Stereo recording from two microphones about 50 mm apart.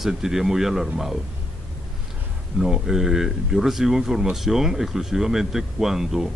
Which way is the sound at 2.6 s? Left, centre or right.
Centre.